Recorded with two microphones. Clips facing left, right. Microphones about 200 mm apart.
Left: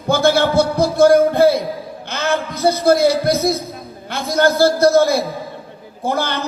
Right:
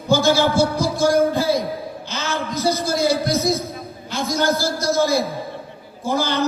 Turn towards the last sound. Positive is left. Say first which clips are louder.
# left 1 dB
turn(degrees=60)  # may be behind; listen again after turning